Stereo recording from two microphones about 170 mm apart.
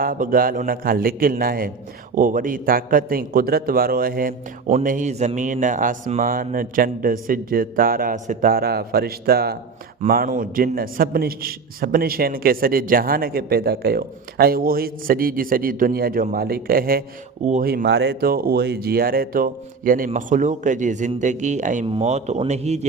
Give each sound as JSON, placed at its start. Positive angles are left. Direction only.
{"t": 0.0, "sound": "a man's voice", "side_deg": -55}
{"t": 10.1, "sound": "a man's voice", "side_deg": -55}
{"t": 21.8, "sound": "speech", "side_deg": -35}